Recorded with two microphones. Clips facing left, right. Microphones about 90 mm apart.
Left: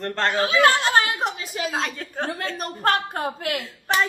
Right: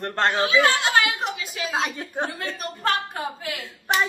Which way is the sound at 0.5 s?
45° left (ahead or behind).